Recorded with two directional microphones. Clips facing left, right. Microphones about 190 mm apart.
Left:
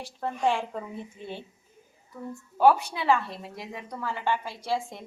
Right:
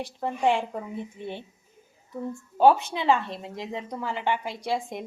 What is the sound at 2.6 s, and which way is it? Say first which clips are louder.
A woman's voice: right 2 dB; 25° right (ahead or behind).